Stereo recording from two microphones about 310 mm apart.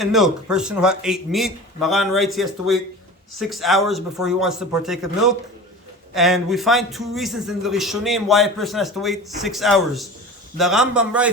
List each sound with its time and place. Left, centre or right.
0.0 s a man's voice: centre